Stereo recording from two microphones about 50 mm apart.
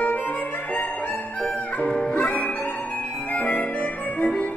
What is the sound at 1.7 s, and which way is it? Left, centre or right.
Music, left.